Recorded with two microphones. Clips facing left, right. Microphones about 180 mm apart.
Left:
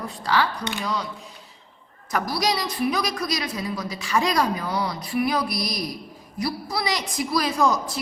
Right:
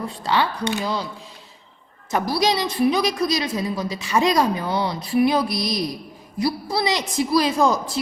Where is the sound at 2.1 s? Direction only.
25° right (ahead or behind).